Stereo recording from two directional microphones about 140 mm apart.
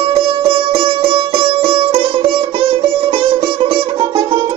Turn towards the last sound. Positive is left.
turn(degrees=-35)  # may be behind; listen again after turning